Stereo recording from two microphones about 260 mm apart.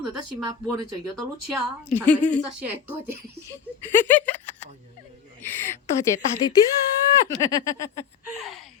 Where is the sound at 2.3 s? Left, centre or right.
Centre.